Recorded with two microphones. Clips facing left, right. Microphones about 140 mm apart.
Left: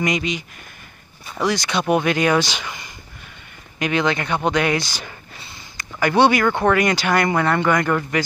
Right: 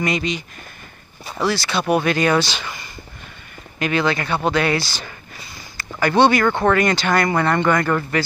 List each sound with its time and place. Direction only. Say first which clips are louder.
0.0 s speech: even; 10° left (ahead or behind)
1.4 s speech: even; 15° left (ahead or behind)